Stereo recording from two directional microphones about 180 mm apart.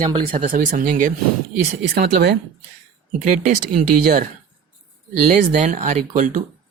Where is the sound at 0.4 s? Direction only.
50° right (ahead or behind).